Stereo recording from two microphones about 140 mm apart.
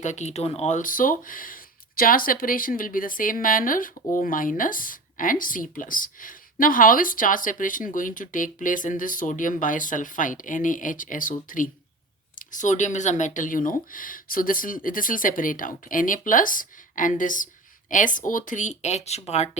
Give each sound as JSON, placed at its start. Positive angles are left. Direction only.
{"t": 0.0, "sound": "speech", "side_deg": 60}
{"t": 0.8, "sound": "speech", "side_deg": 75}